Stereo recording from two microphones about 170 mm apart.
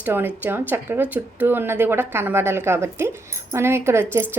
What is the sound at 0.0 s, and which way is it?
A woman's voice, 10° right (ahead or behind).